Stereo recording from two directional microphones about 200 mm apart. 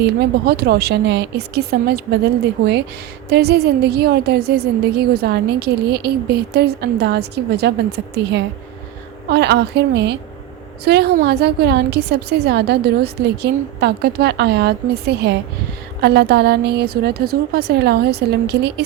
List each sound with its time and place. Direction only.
0.0 s a woman's voice: 55° right (ahead or behind)
3.2 s a woman's voice: 55° right (ahead or behind)